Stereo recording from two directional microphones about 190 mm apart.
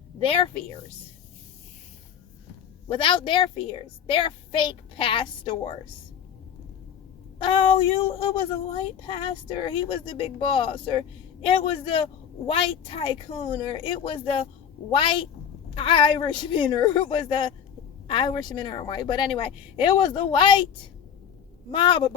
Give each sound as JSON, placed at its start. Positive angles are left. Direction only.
{"t": 0.2, "sound": "speech", "side_deg": 25}
{"t": 2.8, "sound": "speech", "side_deg": 30}
{"t": 7.3, "sound": "speech", "side_deg": 25}
{"t": 21.7, "sound": "speech", "side_deg": 25}